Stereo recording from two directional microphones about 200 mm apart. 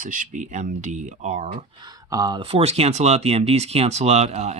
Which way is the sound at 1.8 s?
20° right (ahead or behind).